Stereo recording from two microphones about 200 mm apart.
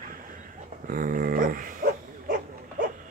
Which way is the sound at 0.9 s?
45° right (ahead or behind).